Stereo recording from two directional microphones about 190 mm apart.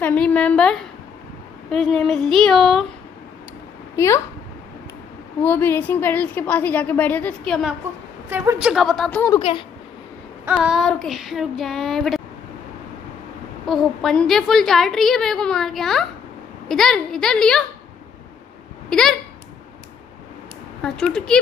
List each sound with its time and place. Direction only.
0.0 s a woman's voice: 5° left (ahead or behind)
3.9 s a woman's voice: 15° left (ahead or behind)
5.4 s a woman's voice: 10° left (ahead or behind)
8.3 s a woman's voice: 10° right (ahead or behind)
9.4 s speech: 30° left (ahead or behind)
10.5 s a woman's voice: centre (ahead or behind)
13.7 s a woman's voice: centre (ahead or behind)
18.9 s speech: 5° left (ahead or behind)
20.8 s a woman's voice: 5° left (ahead or behind)